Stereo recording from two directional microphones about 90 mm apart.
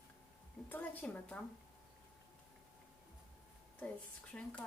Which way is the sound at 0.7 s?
15° left (ahead or behind).